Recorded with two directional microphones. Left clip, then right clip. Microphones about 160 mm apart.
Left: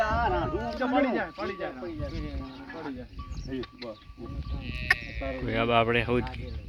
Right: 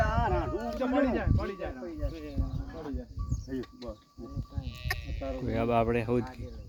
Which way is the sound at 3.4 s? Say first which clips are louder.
Left 3 dB; 10° left (ahead or behind).